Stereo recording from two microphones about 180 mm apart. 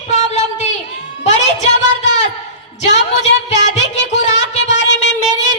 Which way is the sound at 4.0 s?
40° left (ahead or behind).